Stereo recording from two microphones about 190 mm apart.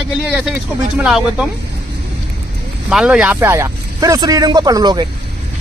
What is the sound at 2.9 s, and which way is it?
Speech, 5° right (ahead or behind).